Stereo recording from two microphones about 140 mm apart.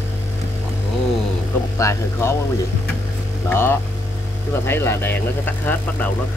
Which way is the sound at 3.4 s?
15° left (ahead or behind).